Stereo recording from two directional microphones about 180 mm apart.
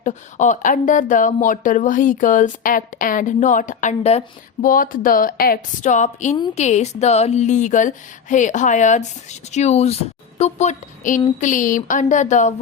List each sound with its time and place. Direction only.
0.0 s speech: 45° left (ahead or behind)
4.6 s speech: 50° left (ahead or behind)